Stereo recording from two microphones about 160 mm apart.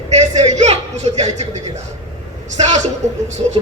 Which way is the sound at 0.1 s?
45° right (ahead or behind).